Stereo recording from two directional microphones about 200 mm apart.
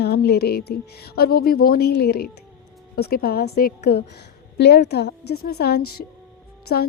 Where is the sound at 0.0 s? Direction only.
55° left (ahead or behind).